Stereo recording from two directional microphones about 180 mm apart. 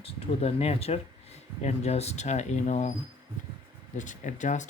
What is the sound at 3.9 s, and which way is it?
Speech, 45° left (ahead or behind).